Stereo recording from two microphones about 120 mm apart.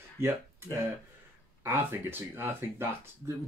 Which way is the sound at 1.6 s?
20° right (ahead or behind).